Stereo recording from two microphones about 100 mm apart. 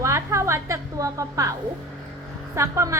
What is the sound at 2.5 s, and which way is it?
Female singing, 30° right (ahead or behind).